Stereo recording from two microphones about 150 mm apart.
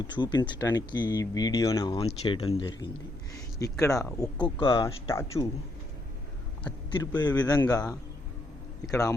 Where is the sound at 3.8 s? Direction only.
25° left (ahead or behind).